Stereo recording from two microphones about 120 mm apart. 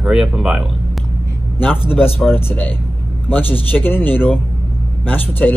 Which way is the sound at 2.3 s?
15° left (ahead or behind).